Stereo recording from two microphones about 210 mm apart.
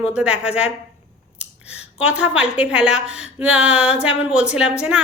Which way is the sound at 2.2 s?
5° right (ahead or behind).